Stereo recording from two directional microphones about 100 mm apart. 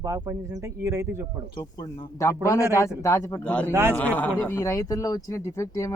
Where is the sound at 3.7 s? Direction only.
25° right (ahead or behind).